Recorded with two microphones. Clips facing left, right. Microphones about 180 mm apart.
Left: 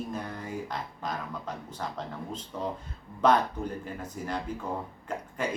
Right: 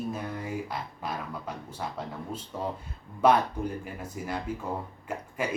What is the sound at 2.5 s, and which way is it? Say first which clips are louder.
Speech: even; 10° right (ahead or behind).